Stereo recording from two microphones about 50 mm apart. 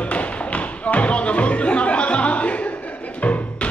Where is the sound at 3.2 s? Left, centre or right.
Left.